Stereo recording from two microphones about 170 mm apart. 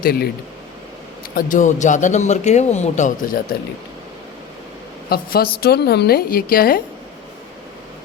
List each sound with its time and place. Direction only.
0.0 s a woman's voice: 60° left (ahead or behind)
1.4 s a man's voice: 50° left (ahead or behind)
5.0 s a woman's voice: 65° left (ahead or behind)